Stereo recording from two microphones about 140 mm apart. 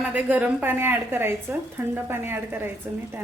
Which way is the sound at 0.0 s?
10° right (ahead or behind).